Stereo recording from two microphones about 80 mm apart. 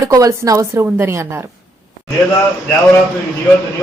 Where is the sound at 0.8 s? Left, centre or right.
Right.